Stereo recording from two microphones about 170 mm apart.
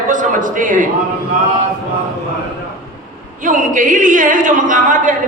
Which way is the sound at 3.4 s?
50° right (ahead or behind).